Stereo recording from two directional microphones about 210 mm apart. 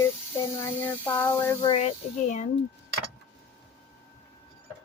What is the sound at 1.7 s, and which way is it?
Speech, 30° left (ahead or behind).